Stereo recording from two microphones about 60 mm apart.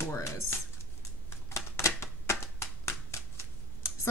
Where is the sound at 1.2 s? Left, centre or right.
Left.